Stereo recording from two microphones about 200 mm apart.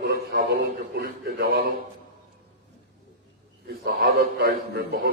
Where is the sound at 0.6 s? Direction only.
55° right (ahead or behind).